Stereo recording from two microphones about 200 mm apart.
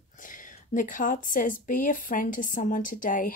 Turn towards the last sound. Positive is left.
turn(degrees=45)  # may be behind; listen again after turning